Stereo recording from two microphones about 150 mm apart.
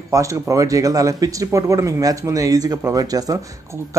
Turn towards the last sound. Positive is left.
turn(degrees=-25)  # may be behind; listen again after turning